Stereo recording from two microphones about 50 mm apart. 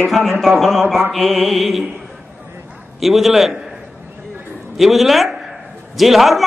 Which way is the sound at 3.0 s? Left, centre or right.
Centre.